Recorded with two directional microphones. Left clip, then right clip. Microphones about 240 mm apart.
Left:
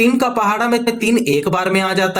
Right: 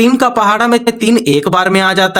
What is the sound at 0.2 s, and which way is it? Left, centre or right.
Speech, right.